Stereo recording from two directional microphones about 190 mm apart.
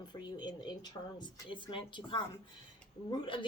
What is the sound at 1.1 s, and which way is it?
Speech, 25° left (ahead or behind).